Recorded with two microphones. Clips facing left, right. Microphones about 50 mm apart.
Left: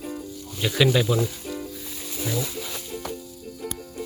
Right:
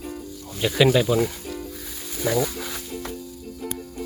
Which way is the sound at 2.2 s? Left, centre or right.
Right.